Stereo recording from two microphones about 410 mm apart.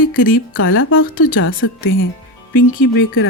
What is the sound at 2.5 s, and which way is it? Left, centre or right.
Speech, left.